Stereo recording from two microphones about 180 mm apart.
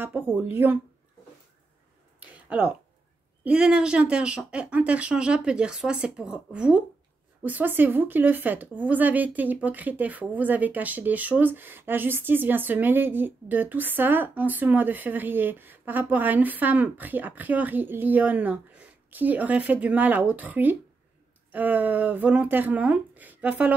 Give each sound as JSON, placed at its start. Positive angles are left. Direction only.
{"t": 0.0, "sound": "speech", "side_deg": -10}
{"t": 3.4, "sound": "speech", "side_deg": -5}